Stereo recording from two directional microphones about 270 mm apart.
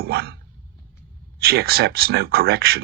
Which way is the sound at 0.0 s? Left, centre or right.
Right.